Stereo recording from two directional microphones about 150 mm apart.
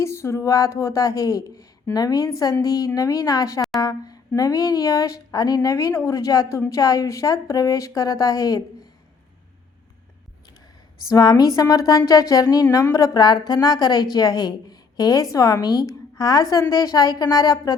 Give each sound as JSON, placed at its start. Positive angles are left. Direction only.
{"t": 0.0, "sound": "a woman's voice", "side_deg": 20}
{"t": 11.1, "sound": "a woman's voice", "side_deg": 25}